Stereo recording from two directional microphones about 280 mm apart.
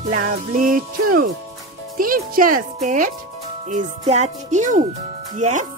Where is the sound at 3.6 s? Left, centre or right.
Right.